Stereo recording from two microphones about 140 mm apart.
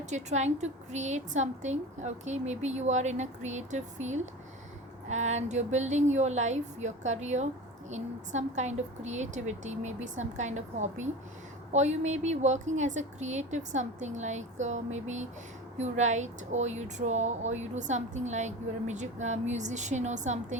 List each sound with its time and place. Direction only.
0.0 s speech: 55° right (ahead or behind)